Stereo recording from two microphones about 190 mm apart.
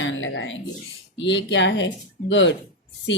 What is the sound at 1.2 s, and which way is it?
A woman's voice, 70° left (ahead or behind).